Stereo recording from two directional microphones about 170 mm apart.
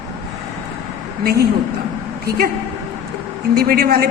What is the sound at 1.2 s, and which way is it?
Speech, 65° right (ahead or behind).